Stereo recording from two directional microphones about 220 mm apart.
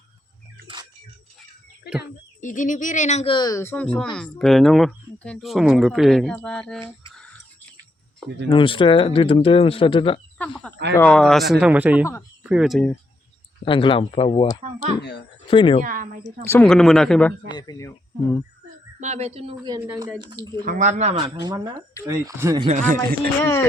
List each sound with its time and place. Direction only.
2.0 s speech: 35° left (ahead or behind); by 6.9 s 5° left (ahead or behind)
8.4 s speech: 20° left (ahead or behind)
10.4 s speech: 5° left (ahead or behind)
13.7 s speech: 25° left (ahead or behind)
15.8 s speech: 40° right (ahead or behind)
16.5 s speech: 5° left (ahead or behind)
17.5 s speech: 15° left (ahead or behind)
18.9 s speech: 30° right (ahead or behind)
19.9 s speech: 5° right (ahead or behind)
20.1 s speech: 20° right (ahead or behind)
20.7 s speech: 35° right (ahead or behind)
21.4 s speech: 15° right (ahead or behind)
22.6 s speech: 35° right (ahead or behind)
23.4 s speech: 10° left (ahead or behind)